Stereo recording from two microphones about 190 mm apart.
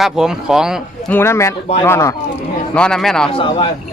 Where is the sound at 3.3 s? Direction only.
25° left (ahead or behind).